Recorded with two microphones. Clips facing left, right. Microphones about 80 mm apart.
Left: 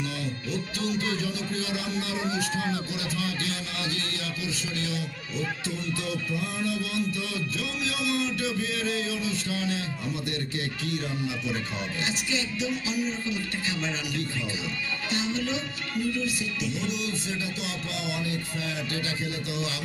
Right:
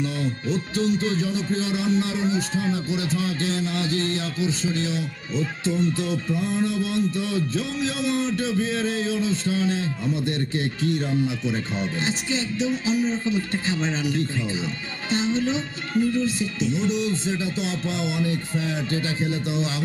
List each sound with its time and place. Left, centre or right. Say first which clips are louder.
0.0 s speech: right 6 dB; right